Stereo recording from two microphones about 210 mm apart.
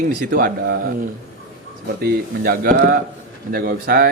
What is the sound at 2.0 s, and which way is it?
Speech, 45° right (ahead or behind).